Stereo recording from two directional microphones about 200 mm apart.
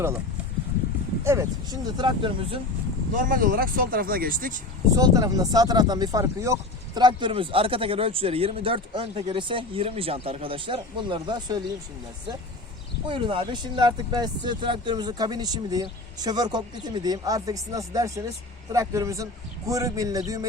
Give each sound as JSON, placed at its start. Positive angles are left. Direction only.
{"t": 1.2, "sound": "speech", "side_deg": -15}
{"t": 3.2, "sound": "speech", "side_deg": -40}
{"t": 4.9, "sound": "speech", "side_deg": -20}
{"t": 13.1, "sound": "a man's voice", "side_deg": -25}